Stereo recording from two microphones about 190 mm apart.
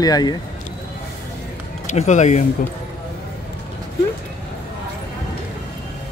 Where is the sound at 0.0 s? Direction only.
20° left (ahead or behind).